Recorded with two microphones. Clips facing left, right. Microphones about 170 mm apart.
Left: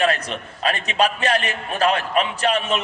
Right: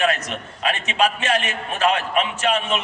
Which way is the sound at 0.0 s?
35° left (ahead or behind).